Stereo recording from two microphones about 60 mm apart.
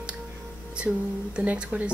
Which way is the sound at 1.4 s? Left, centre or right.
Centre.